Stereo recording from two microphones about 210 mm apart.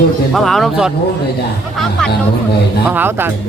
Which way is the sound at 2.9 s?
10° right (ahead or behind).